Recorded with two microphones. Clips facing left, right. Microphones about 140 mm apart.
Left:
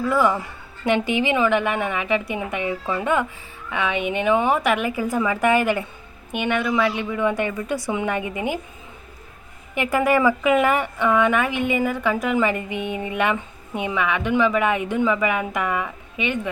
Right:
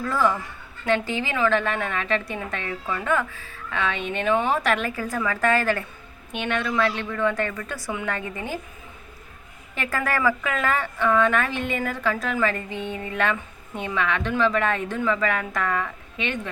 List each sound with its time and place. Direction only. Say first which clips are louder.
0.0 s a woman's voice: left 3 dB; 15° left (ahead or behind)
9.7 s a woman's voice: left 7 dB; 15° left (ahead or behind)